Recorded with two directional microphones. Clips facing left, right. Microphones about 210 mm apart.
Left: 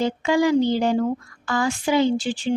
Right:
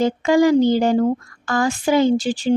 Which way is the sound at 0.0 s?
45° right (ahead or behind).